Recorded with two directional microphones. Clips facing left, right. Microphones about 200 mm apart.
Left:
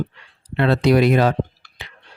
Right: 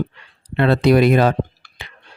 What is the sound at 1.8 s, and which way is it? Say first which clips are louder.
Chewing: right 1 dB; 55° right (ahead or behind).